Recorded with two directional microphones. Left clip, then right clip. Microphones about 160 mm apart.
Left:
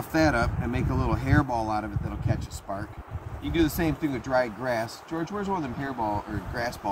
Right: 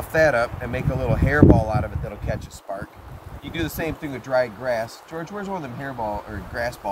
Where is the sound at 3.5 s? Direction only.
15° right (ahead or behind).